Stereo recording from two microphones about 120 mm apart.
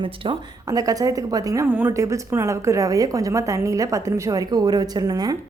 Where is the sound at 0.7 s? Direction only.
30° right (ahead or behind).